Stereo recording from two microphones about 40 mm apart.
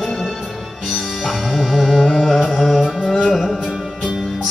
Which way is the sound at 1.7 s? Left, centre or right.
Centre.